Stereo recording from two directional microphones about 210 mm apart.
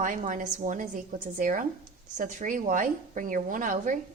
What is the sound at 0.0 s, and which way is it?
A woman's voice, 40° right (ahead or behind).